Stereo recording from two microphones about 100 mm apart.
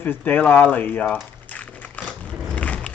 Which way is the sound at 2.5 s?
15° left (ahead or behind).